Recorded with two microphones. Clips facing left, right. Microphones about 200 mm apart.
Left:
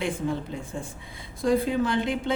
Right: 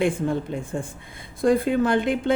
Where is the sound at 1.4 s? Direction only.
55° right (ahead or behind).